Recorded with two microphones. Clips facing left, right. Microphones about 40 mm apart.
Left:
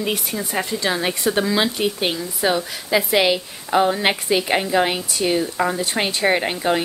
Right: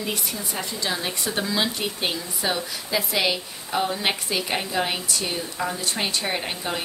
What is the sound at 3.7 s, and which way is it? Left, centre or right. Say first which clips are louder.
A woman's voice: left 7 dB; left.